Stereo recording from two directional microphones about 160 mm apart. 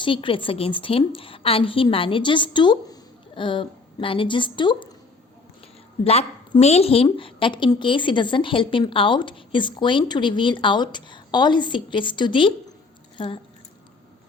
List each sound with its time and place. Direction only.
0.0 s a woman's voice: 30° left (ahead or behind)
6.1 s a woman's voice: 40° left (ahead or behind)